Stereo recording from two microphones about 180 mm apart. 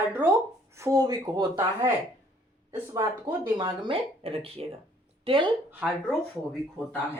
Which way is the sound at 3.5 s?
25° right (ahead or behind).